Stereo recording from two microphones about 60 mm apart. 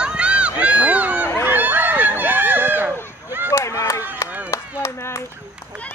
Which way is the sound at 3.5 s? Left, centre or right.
Left.